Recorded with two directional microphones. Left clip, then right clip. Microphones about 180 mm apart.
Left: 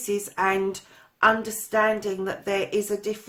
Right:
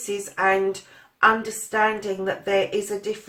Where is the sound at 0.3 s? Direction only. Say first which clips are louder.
Right 5 dB; 50° left (ahead or behind).